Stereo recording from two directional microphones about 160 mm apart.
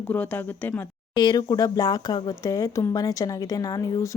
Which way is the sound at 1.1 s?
25° left (ahead or behind).